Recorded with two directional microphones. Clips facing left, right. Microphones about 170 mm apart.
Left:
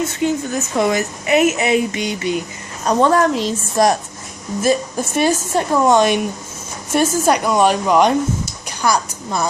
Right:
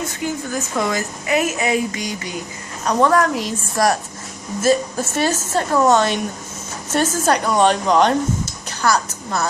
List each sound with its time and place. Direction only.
0.2 s a woman's voice: 25° left (ahead or behind)